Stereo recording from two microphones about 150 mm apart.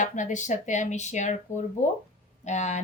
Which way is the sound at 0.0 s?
55° left (ahead or behind).